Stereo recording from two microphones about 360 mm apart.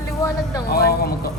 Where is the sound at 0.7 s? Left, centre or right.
Left.